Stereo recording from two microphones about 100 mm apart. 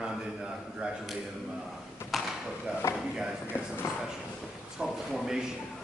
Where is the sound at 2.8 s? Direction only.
25° left (ahead or behind).